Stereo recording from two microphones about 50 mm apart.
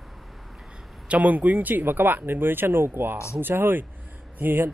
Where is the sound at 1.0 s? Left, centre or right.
Right.